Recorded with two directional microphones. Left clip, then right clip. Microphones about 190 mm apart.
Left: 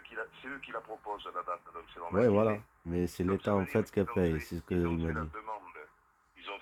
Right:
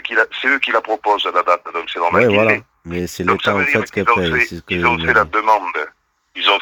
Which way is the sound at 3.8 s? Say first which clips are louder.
Right 15 dB; 25° right (ahead or behind).